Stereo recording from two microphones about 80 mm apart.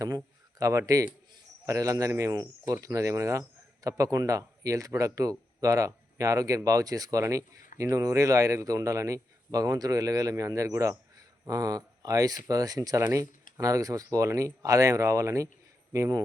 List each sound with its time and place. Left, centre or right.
0.6 s a man's voice: right